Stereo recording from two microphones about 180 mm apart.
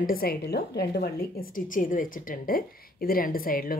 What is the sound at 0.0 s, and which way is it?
A woman's voice, 55° left (ahead or behind).